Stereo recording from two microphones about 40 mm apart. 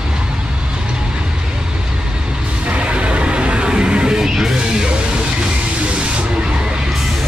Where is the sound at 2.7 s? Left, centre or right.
Right.